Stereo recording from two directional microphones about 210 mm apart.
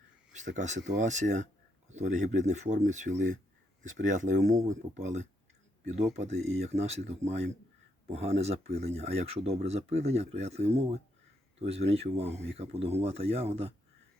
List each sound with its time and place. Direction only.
0.3 s speech: 35° right (ahead or behind)
6.5 s speech: 30° right (ahead or behind)